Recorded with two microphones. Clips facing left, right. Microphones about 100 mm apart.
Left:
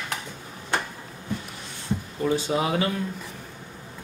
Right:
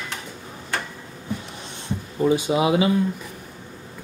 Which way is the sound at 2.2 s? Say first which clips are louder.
Right 5 dB; 15° right (ahead or behind).